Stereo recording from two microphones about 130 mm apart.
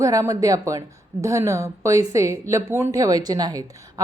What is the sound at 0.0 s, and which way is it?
A woman's voice, 25° right (ahead or behind).